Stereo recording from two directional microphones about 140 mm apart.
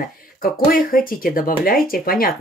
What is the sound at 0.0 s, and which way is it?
Speech, 90° left.